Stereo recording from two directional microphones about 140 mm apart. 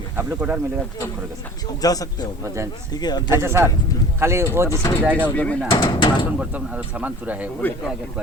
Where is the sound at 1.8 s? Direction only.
25° left (ahead or behind).